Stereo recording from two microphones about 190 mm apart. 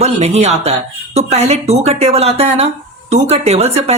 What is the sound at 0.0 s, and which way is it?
Speech, 35° right (ahead or behind).